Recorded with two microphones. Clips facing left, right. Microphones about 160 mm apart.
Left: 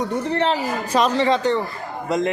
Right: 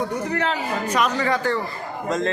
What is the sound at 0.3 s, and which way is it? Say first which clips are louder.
A man's voice: left 3 dB; 30° left (ahead or behind).